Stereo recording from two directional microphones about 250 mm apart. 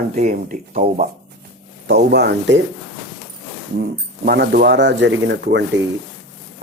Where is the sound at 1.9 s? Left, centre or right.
Right.